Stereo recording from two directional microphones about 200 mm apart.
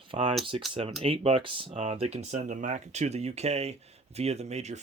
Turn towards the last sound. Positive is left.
turn(degrees=-35)  # may be behind; listen again after turning